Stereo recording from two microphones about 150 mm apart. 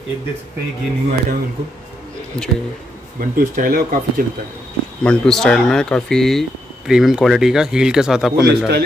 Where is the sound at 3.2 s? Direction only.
70° right (ahead or behind).